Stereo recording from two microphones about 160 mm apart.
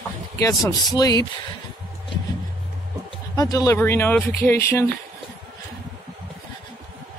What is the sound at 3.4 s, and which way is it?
Speech, 20° left (ahead or behind).